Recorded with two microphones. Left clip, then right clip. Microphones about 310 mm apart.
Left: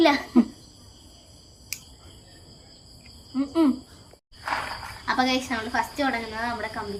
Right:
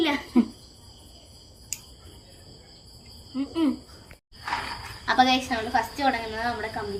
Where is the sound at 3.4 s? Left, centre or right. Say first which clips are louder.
Left 4 dB; centre.